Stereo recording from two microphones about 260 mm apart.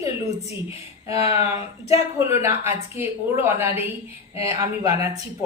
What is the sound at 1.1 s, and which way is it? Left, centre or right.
Speech, centre.